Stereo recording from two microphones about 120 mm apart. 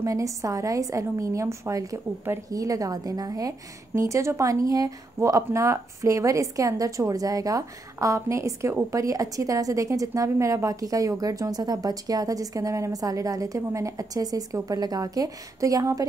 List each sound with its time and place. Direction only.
0.0 s a woman's voice: 25° right (ahead or behind)